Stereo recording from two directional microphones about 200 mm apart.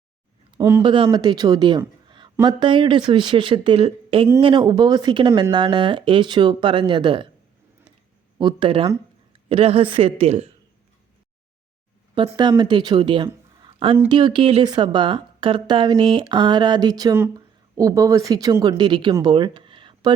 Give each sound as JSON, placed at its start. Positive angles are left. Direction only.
{"t": 0.6, "sound": "a woman's voice", "side_deg": -20}
{"t": 2.0, "sound": "a sound", "side_deg": -25}
{"t": 2.3, "sound": "a woman's voice", "side_deg": -20}
{"t": 8.4, "sound": "a woman's voice", "side_deg": -25}
{"t": 12.4, "sound": "a woman's voice", "side_deg": -20}